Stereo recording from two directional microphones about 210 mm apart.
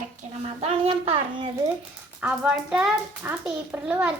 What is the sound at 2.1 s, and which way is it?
A child's voice, 5° right (ahead or behind).